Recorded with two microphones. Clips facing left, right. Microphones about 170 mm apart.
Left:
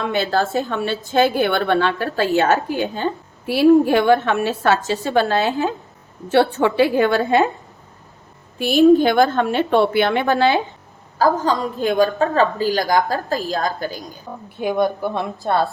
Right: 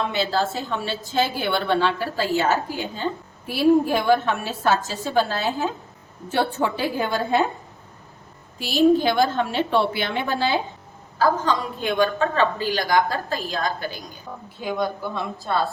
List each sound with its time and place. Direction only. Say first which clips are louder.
0.0 s a woman's voice: left 3 dB; 55° left (ahead or behind); by 7.4 s 75° left (ahead or behind)
8.5 s a woman's voice: left 5 dB; 55° left (ahead or behind)
11.2 s a woman's voice: left 3 dB; 40° left (ahead or behind)
14.6 s a woman's voice: left 6 dB; 55° left (ahead or behind)